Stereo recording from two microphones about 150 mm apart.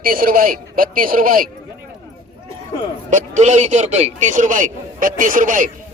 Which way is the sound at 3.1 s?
50° right (ahead or behind).